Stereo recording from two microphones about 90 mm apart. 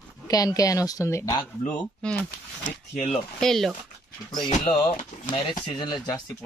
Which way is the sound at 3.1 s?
5° left (ahead or behind).